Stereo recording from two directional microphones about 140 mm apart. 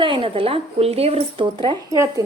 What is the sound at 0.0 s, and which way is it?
A woman's voice, 40° right (ahead or behind).